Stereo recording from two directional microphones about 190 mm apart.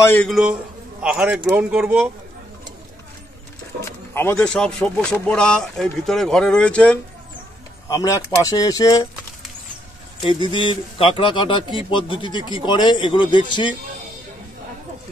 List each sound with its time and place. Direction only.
0.0 s a man's voice: 10° left (ahead or behind)
0.3 s speech: 5° right (ahead or behind)
3.8 s speech: 15° left (ahead or behind)
7.9 s a man's voice: 15° left (ahead or behind)
10.2 s a man's voice: 25° left (ahead or behind)